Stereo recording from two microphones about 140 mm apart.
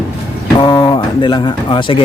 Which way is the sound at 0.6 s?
35° left (ahead or behind).